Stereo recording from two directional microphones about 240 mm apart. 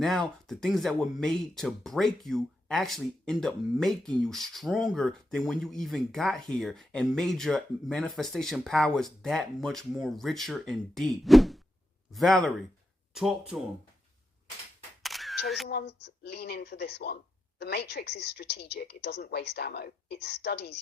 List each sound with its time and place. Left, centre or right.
0.0 s speech: centre
15.0 s single-lens reflex camera: centre
15.4 s speech: centre
15.7 s speech: left